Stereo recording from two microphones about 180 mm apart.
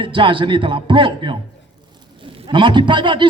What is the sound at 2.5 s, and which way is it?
Speech, 25° right (ahead or behind).